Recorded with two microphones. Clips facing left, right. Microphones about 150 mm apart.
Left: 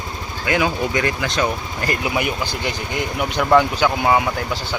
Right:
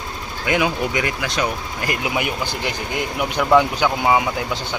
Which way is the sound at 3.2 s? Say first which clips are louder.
Even; 5° left (ahead or behind).